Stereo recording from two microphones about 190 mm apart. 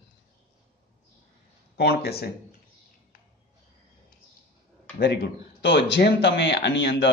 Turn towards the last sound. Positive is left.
turn(degrees=65)  # may be behind; listen again after turning